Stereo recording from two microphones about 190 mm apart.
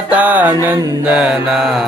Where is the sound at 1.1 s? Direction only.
5° right (ahead or behind).